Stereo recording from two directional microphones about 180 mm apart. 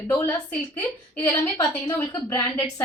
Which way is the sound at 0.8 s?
15° left (ahead or behind).